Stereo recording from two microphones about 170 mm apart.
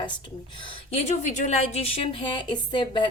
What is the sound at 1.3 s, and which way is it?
Speech, 45° left (ahead or behind).